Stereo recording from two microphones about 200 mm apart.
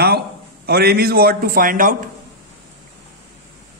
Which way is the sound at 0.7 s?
50° right (ahead or behind).